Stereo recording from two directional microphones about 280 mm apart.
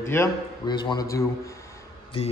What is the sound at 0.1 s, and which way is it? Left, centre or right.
A man's voice, centre.